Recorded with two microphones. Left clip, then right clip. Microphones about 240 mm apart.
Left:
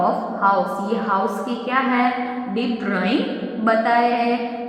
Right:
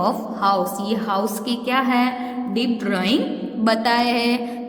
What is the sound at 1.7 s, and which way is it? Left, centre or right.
A woman's voice, right.